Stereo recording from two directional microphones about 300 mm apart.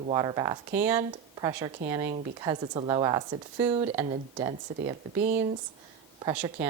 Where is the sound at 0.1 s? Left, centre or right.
Centre.